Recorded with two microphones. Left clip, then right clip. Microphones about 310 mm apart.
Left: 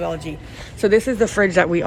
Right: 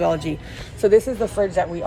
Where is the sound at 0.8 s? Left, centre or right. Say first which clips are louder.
Right 1 dB; left.